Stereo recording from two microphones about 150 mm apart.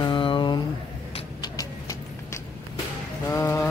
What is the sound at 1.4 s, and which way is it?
Clip-clop, 25° left (ahead or behind).